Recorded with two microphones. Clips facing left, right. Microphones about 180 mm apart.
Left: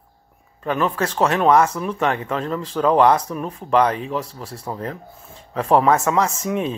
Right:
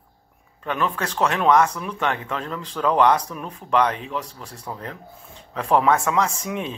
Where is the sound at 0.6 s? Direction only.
35° left (ahead or behind).